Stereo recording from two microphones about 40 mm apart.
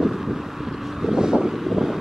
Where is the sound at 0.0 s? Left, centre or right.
Centre.